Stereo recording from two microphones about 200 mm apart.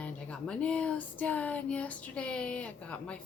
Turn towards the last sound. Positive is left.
turn(degrees=5)  # may be behind; listen again after turning